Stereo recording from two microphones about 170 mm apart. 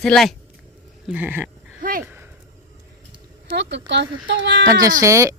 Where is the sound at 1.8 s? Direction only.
55° right (ahead or behind).